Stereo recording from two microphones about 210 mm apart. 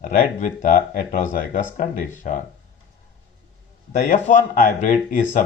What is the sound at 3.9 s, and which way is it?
Speech, 40° left (ahead or behind).